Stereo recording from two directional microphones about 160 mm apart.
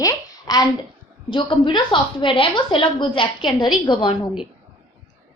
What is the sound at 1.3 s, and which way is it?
A woman's voice, 30° left (ahead or behind).